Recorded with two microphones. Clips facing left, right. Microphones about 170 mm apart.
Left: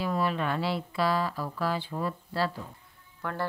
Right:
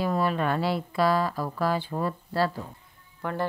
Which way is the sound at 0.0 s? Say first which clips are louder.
Right 3 dB; 45° right (ahead or behind).